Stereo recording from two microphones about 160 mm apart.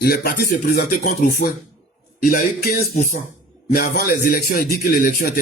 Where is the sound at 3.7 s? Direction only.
65° left (ahead or behind).